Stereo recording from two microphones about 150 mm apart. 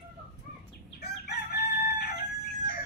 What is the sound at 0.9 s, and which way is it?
Crowing, 90° left.